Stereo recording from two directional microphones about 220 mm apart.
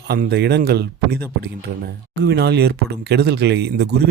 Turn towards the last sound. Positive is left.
turn(degrees=-50)  # may be behind; listen again after turning